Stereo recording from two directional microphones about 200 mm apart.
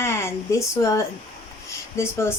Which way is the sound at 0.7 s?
15° left (ahead or behind).